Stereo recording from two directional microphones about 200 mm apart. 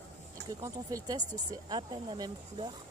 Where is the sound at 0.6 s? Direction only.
15° right (ahead or behind).